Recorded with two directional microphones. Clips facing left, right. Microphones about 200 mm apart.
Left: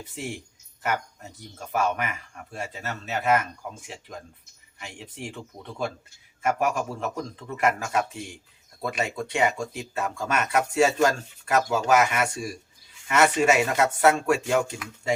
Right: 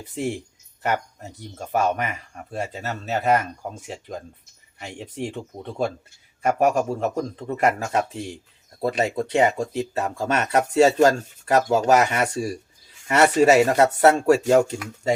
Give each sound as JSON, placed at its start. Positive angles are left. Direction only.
{"t": 0.0, "sound": "speech", "side_deg": -35}